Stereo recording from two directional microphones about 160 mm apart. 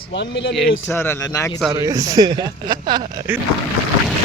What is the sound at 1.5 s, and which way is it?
Speech, centre (ahead or behind).